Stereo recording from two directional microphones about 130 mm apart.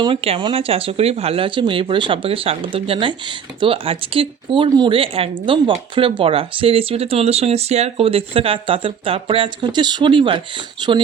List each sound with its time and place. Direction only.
0.0 s speech: 45° right (ahead or behind)